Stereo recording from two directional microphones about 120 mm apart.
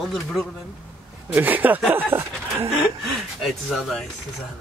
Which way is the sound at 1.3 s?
15° right (ahead or behind).